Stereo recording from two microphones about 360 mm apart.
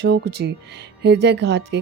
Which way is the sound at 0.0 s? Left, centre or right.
Right.